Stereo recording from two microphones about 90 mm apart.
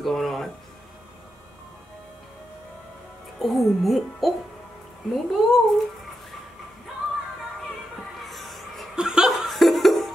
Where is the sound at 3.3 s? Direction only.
Centre (ahead or behind).